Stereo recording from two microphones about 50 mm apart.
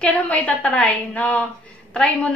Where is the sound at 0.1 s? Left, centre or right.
Left.